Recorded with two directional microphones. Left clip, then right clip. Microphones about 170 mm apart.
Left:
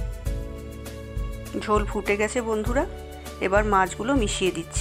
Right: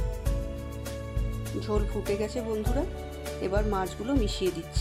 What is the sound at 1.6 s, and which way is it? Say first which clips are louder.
Speech: left 8 dB; 5° left (ahead or behind).